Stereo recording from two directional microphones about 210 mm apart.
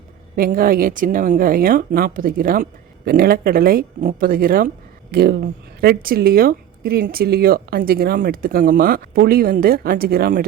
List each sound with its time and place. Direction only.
0.3 s speech: 40° right (ahead or behind)